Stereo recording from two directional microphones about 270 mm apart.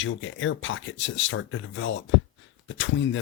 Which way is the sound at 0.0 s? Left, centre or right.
Left.